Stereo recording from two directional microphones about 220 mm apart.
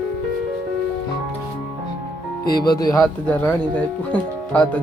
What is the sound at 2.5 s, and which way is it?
Speech, 20° left (ahead or behind).